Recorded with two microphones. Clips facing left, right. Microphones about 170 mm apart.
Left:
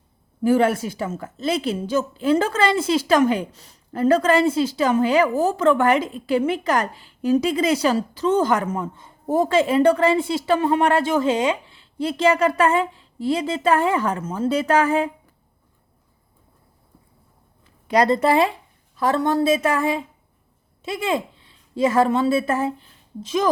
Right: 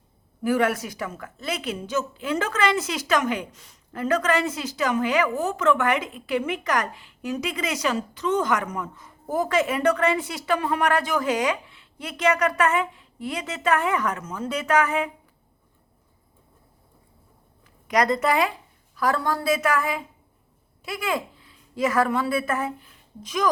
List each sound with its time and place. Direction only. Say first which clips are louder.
0.4 s a woman's voice: left 5 dB; 25° left (ahead or behind)
17.8 s a woman's voice: left 4 dB; 30° left (ahead or behind)